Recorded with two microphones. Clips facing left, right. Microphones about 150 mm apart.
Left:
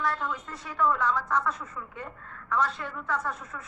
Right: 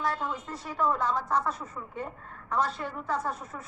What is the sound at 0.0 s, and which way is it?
A woman's voice, 35° right (ahead or behind).